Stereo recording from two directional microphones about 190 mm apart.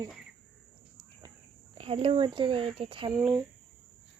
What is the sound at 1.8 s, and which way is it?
Speech, 30° right (ahead or behind).